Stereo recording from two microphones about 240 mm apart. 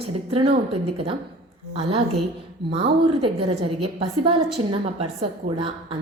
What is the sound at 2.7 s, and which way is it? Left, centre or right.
A woman's voice, right.